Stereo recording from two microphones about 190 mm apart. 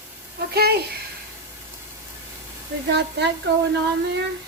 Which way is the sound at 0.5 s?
55° right (ahead or behind).